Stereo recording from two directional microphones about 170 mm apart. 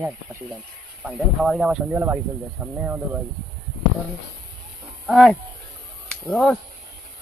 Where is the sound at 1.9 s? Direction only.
15° right (ahead or behind).